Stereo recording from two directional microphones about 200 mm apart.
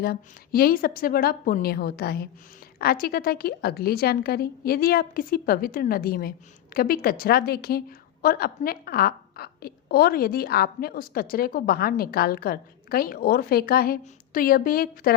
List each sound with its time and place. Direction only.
0.0 s a woman's voice: 50° left (ahead or behind)